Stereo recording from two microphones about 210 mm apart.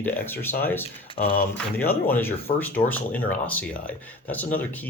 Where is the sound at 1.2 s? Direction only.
40° left (ahead or behind).